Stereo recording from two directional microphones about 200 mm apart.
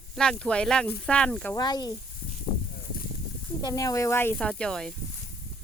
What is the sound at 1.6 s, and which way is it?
Speech, 20° left (ahead or behind).